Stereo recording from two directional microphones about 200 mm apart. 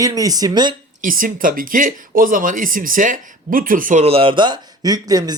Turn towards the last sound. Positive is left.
turn(degrees=-20)  # may be behind; listen again after turning